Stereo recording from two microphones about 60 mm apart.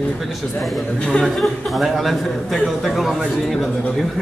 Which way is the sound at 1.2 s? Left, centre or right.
Centre.